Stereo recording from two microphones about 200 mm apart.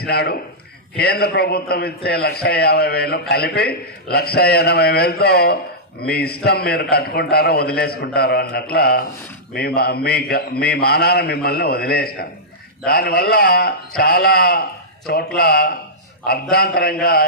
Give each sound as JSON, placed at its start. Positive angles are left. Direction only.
{"t": 0.0, "sound": "a man's voice", "side_deg": 50}